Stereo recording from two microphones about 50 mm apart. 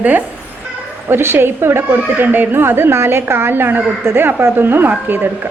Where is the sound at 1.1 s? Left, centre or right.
Right.